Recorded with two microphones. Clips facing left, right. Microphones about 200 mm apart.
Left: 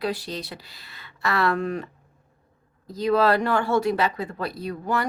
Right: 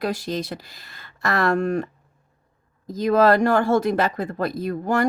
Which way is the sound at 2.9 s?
45° right (ahead or behind).